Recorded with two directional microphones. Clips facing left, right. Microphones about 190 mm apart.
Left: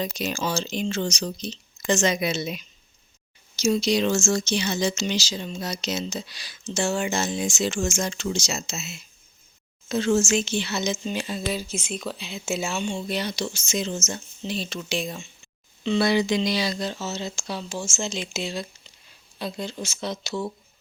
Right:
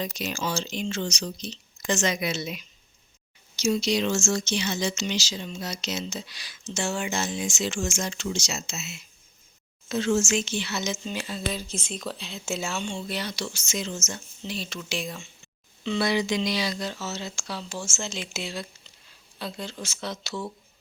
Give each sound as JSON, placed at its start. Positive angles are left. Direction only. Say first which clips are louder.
{"t": 0.0, "sound": "speech", "louder": "left 3 dB", "side_deg": 35}
{"t": 11.9, "sound": "speech", "louder": "left 3 dB", "side_deg": 5}
{"t": 13.1, "sound": "speech", "louder": "left 4 dB", "side_deg": 20}